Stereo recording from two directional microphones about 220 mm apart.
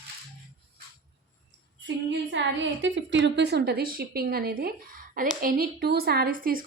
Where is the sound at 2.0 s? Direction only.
55° right (ahead or behind).